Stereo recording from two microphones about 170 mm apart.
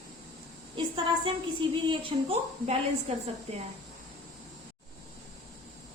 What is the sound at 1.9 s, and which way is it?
A woman's voice, 30° right (ahead or behind).